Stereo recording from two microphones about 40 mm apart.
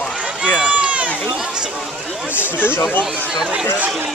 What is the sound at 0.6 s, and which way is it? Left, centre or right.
Run, right.